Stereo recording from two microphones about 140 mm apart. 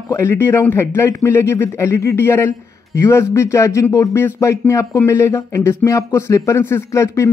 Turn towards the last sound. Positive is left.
turn(degrees=20)  # may be behind; listen again after turning